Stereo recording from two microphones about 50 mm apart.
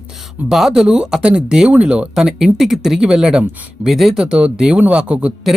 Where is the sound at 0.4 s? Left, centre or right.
Centre.